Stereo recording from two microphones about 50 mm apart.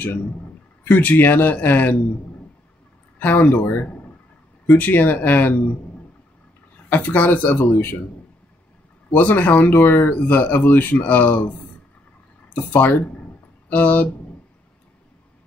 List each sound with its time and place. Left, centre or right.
0.8 s speech: left
3.2 s speech: left
4.7 s speech: left
6.9 s speech: left
7.4 s speech: left
9.1 s speech: left
12.6 s speech: left